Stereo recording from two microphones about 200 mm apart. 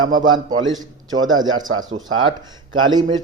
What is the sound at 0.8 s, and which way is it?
Speech, 20° right (ahead or behind).